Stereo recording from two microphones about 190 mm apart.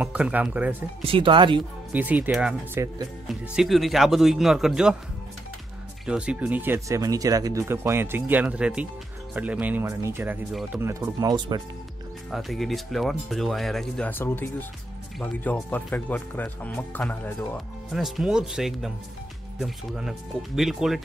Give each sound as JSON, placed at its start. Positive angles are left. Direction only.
{"t": 0.0, "sound": "speech", "side_deg": -5}
{"t": 1.0, "sound": "speech", "side_deg": -25}
{"t": 1.9, "sound": "speech", "side_deg": -10}
{"t": 3.3, "sound": "speech", "side_deg": 0}
{"t": 6.0, "sound": "speech", "side_deg": -5}
{"t": 10.8, "sound": "speech", "side_deg": -15}
{"t": 12.3, "sound": "speech", "side_deg": 0}